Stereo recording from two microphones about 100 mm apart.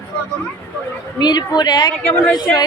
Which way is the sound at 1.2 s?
45° left (ahead or behind).